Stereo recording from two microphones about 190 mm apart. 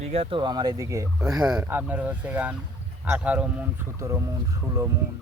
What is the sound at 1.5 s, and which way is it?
Speech, 5° right (ahead or behind).